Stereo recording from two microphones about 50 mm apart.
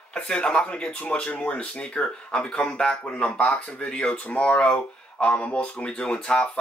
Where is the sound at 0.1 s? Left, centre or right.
Centre.